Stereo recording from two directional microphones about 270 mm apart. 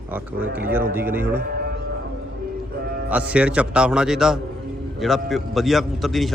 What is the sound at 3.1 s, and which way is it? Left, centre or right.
A man's voice, centre.